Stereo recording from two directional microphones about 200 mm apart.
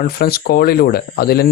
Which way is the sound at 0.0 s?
50° left (ahead or behind).